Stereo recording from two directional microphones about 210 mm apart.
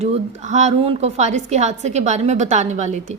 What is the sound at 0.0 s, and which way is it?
A woman's voice, 35° right (ahead or behind).